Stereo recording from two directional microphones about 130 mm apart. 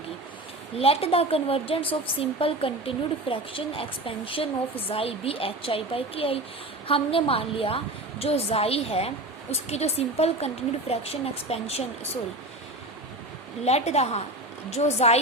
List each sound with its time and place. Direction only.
0.8 s a woman's voice: 50° left (ahead or behind)
13.7 s a woman's voice: 55° left (ahead or behind)